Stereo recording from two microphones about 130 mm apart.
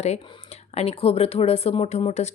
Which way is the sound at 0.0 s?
55° left (ahead or behind).